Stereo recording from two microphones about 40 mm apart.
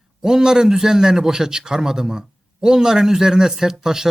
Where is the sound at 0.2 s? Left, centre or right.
Centre.